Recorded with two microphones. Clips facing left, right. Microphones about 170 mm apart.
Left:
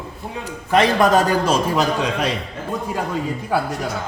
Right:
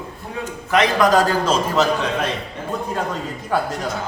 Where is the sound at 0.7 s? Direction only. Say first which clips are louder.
Left 1 dB; 30° left (ahead or behind).